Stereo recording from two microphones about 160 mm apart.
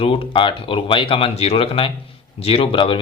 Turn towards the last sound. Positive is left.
turn(degrees=35)  # may be behind; listen again after turning